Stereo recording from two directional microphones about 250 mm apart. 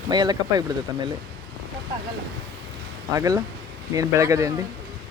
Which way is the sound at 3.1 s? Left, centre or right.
Centre.